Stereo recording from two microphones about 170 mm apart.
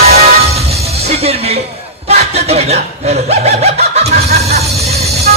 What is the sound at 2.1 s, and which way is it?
Speech, 40° right (ahead or behind).